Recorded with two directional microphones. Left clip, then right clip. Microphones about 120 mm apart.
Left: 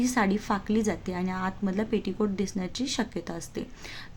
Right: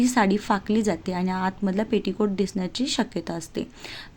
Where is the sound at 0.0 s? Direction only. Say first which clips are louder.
Right 5 dB; 35° right (ahead or behind).